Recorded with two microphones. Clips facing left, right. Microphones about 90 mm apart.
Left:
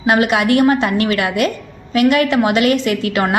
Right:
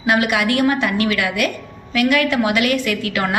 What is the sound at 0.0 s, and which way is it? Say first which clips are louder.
A woman's voice: left 3 dB; 30° left (ahead or behind).